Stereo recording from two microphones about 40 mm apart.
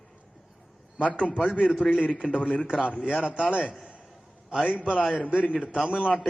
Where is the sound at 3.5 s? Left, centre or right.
Right.